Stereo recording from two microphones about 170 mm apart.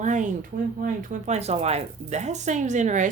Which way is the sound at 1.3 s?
40° right (ahead or behind).